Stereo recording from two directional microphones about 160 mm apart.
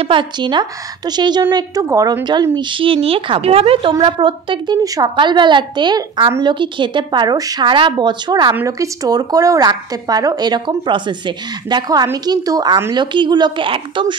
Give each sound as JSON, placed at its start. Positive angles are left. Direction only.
{"t": 0.0, "sound": "speech", "side_deg": -30}